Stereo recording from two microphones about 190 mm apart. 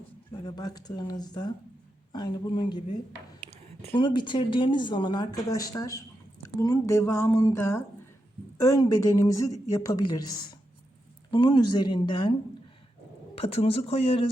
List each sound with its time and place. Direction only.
0.4 s speech: 20° left (ahead or behind)
3.9 s speech: 25° left (ahead or behind)